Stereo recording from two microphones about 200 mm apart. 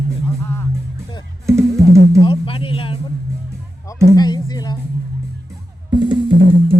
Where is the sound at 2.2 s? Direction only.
25° left (ahead or behind).